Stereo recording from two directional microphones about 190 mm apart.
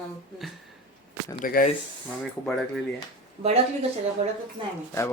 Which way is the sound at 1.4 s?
45° left (ahead or behind).